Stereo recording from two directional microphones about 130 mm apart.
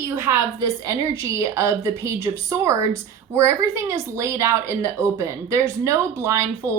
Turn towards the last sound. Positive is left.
turn(degrees=-20)  # may be behind; listen again after turning